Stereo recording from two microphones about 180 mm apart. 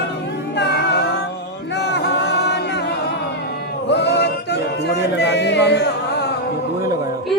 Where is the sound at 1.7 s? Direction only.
70° left (ahead or behind).